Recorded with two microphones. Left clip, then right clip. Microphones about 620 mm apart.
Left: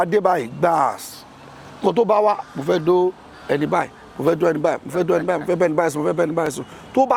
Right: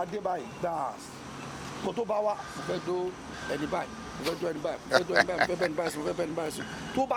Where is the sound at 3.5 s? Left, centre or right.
Left.